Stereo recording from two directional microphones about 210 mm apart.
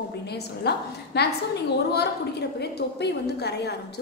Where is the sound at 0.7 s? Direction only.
50° left (ahead or behind).